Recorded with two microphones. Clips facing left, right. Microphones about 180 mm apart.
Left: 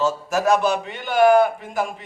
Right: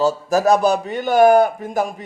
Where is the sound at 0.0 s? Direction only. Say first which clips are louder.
Right 4 dB; 35° right (ahead or behind).